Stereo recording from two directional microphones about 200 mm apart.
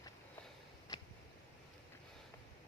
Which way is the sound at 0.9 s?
20° left (ahead or behind).